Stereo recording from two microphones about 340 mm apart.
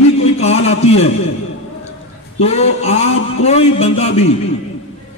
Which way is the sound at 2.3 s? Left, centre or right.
Centre.